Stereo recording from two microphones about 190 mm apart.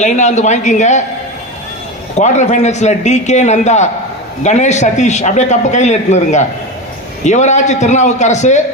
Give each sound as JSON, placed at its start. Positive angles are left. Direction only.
{"t": 0.0, "sound": "a man's voice", "side_deg": 40}
{"t": 2.1, "sound": "a man's voice", "side_deg": 40}